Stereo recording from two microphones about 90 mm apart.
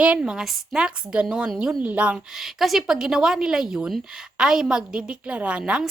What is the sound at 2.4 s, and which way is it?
A woman's voice, 5° right (ahead or behind).